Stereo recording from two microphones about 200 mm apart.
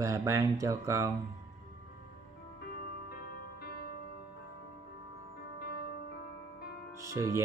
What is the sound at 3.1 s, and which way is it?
Music, 50° left (ahead or behind).